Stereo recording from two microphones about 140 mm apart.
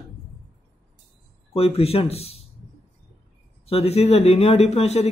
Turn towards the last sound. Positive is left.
turn(degrees=50)  # may be behind; listen again after turning